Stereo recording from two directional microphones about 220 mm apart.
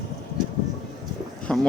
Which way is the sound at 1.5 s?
5° left (ahead or behind).